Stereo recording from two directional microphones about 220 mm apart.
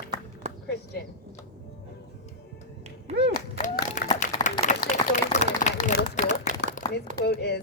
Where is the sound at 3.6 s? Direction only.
35° left (ahead or behind).